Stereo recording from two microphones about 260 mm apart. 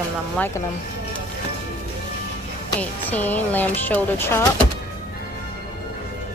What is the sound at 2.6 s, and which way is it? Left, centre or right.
Speech, centre.